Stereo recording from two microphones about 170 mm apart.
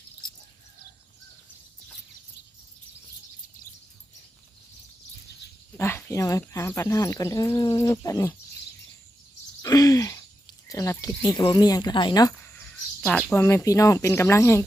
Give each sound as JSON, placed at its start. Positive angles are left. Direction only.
{"t": 5.7, "sound": "speech", "side_deg": 15}
{"t": 9.6, "sound": "a sound", "side_deg": 20}
{"t": 10.7, "sound": "speech", "side_deg": 20}
{"t": 13.4, "sound": "speech", "side_deg": 15}